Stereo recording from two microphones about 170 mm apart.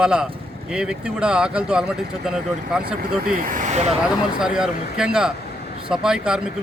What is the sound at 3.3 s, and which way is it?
Speech, 55° right (ahead or behind).